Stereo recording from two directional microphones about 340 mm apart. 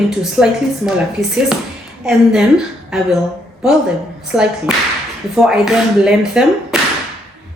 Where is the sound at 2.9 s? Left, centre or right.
Centre.